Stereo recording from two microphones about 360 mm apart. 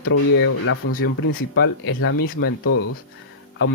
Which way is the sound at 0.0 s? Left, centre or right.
Left.